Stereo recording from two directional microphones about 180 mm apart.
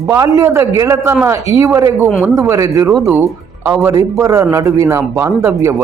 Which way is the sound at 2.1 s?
Centre (ahead or behind).